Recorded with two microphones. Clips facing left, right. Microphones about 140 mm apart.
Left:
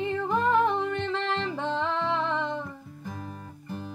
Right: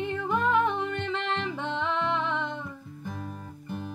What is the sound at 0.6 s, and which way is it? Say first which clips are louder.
Music: left 2 dB; centre (ahead or behind).